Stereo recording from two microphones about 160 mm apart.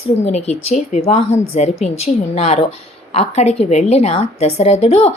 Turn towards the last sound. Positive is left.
turn(degrees=40)  # may be behind; listen again after turning